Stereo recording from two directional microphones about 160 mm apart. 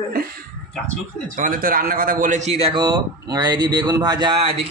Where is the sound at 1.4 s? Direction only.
60° right (ahead or behind).